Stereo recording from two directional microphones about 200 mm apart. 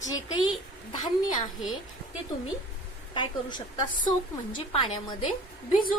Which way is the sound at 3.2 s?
20° left (ahead or behind).